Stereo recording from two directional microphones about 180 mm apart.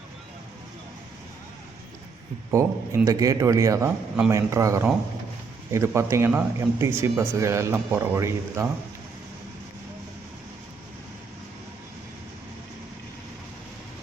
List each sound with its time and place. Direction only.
2.5 s a man's voice: 15° right (ahead or behind)